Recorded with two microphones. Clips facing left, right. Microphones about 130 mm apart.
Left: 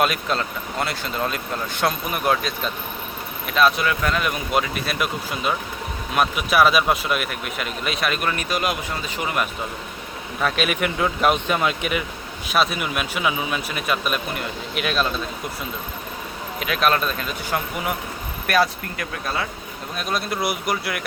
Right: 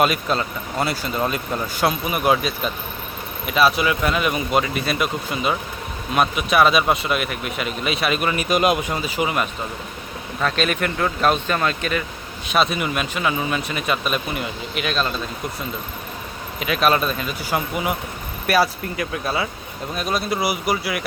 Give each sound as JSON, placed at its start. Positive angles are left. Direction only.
{"t": 0.0, "sound": "speech", "side_deg": 0}
{"t": 8.4, "sound": "speech", "side_deg": -20}
{"t": 9.0, "sound": "speech", "side_deg": -5}
{"t": 10.4, "sound": "speech", "side_deg": 10}
{"t": 12.5, "sound": "speech", "side_deg": 0}
{"t": 16.6, "sound": "speech", "side_deg": 0}